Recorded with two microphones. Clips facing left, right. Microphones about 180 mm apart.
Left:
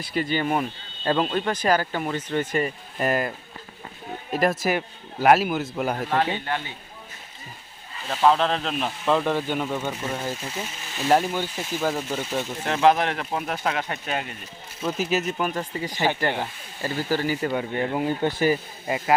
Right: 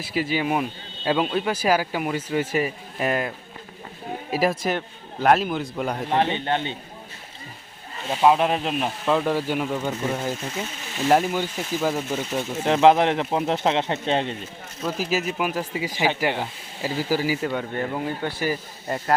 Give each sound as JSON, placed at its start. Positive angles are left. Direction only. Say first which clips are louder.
{"t": 0.0, "sound": "speech", "louder": "right 1 dB", "side_deg": -5}
{"t": 6.3, "sound": "speech", "louder": "right 4 dB", "side_deg": -25}
{"t": 8.1, "sound": "speech", "louder": "right 2 dB", "side_deg": -15}
{"t": 12.6, "sound": "speech", "louder": "right 4 dB", "side_deg": -20}
{"t": 14.8, "sound": "speech", "louder": "even", "side_deg": 0}
{"t": 17.5, "sound": "speech", "louder": "left 1 dB", "side_deg": 5}
{"t": 17.9, "sound": "speech", "louder": "left 3 dB", "side_deg": 20}
{"t": 18.9, "sound": "speech", "louder": "left 1 dB", "side_deg": 10}